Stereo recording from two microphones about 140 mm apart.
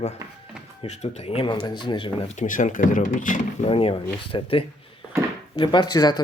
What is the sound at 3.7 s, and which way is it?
Speech, 40° left (ahead or behind).